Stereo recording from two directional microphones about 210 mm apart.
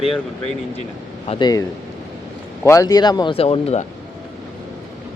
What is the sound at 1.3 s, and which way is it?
Speech, 20° left (ahead or behind).